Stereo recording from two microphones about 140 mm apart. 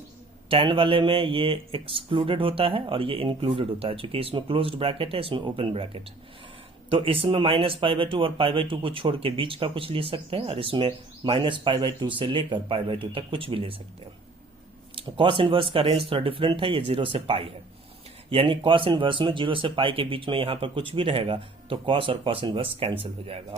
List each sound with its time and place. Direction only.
0.4 s speech: 40° right (ahead or behind)
14.9 s speech: 35° right (ahead or behind)